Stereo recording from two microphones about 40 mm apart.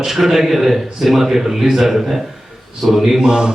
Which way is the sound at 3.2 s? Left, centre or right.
Centre.